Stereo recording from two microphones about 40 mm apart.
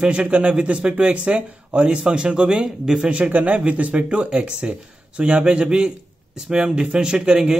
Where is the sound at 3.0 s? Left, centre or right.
Right.